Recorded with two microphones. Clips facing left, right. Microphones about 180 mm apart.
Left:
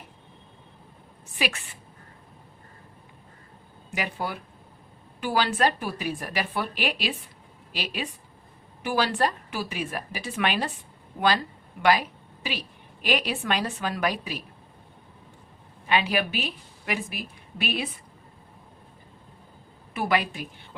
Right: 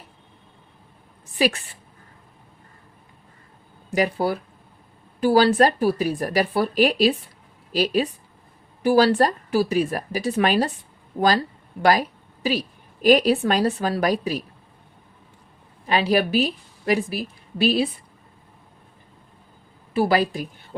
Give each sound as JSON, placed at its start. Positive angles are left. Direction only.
{"t": 1.4, "sound": "a woman's voice", "side_deg": -35}
{"t": 3.9, "sound": "a woman's voice", "side_deg": -40}
{"t": 15.9, "sound": "a woman's voice", "side_deg": -35}
{"t": 19.9, "sound": "a woman's voice", "side_deg": -30}